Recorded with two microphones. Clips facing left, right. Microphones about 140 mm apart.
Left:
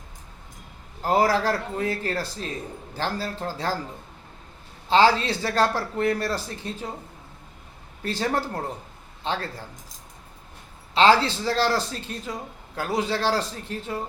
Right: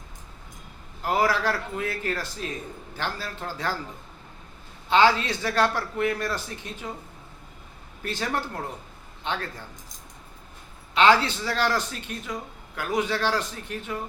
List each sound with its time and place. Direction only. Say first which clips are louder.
1.0 s speech: left 3 dB; 40° left (ahead or behind)
4.9 s speech: left 2 dB; 35° left (ahead or behind)
8.0 s speech: left 3 dB; 35° left (ahead or behind)
10.9 s speech: left 1 dB; 35° left (ahead or behind)